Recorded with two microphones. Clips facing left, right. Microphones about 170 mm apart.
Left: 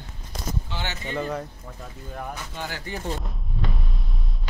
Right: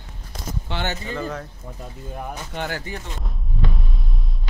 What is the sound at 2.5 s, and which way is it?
Speech, 60° right (ahead or behind).